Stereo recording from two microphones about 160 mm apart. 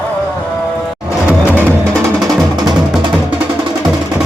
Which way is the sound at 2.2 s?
25° right (ahead or behind).